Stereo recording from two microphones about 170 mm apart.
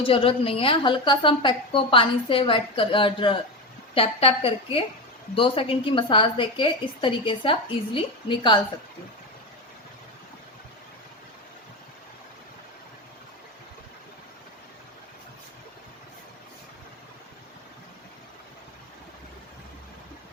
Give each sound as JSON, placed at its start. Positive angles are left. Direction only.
{"t": 0.0, "sound": "a woman's voice", "side_deg": 35}